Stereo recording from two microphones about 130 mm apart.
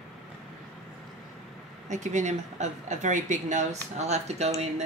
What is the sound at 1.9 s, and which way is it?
A woman's voice, 70° right (ahead or behind).